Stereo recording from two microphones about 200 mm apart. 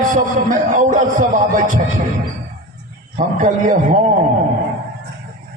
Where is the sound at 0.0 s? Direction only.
40° right (ahead or behind).